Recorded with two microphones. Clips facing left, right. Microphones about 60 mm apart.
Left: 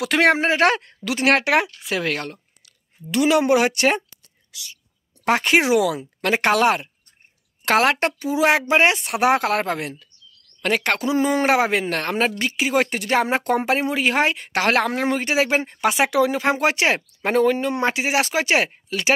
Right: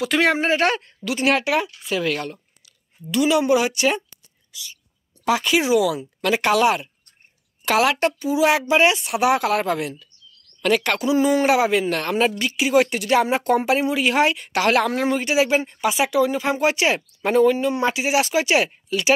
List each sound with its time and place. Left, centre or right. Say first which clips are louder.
0.0 s speech: left 2 dB; left
1.9 s speech: right 1 dB; left
4.5 s speech: right 1 dB; left
5.2 s speech: left 2 dB; left
5.9 s speech: even; left
15.0 s speech: right 1 dB; left